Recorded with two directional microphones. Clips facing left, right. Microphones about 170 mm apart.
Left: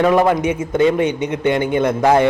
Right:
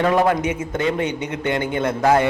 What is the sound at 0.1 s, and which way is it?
A man's voice, 25° left (ahead or behind).